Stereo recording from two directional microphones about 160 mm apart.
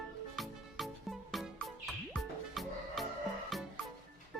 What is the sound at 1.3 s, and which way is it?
Music, centre (ahead or behind).